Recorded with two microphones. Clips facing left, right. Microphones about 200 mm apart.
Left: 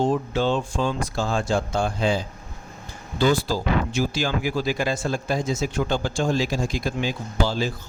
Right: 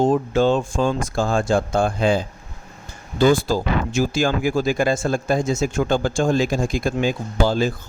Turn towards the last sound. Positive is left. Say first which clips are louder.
# right 5 dB
turn(degrees=-50)  # may be behind; listen again after turning